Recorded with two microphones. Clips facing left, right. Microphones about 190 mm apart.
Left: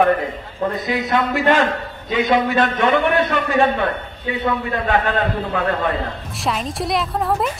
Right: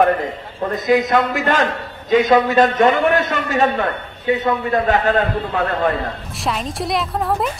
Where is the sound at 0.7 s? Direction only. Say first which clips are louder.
Right 7 dB; 45° right (ahead or behind).